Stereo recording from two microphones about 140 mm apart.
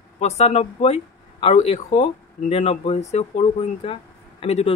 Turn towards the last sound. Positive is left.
turn(degrees=50)  # may be behind; listen again after turning